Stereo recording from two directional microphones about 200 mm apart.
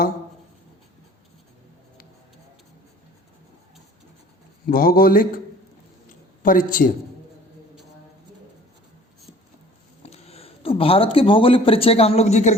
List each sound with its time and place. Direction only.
4.7 s speech: 45° left (ahead or behind)
6.4 s speech: 45° left (ahead or behind)
10.0 s speech: 30° left (ahead or behind)